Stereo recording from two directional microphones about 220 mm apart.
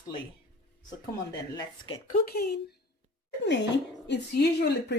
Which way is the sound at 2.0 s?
45° left (ahead or behind).